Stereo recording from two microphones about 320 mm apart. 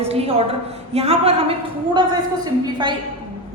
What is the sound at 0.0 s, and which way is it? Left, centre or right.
A woman's voice, centre.